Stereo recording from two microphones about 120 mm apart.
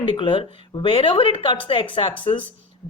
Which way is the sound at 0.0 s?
45° left (ahead or behind).